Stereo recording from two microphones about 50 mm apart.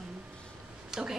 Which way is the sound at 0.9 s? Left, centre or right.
Centre.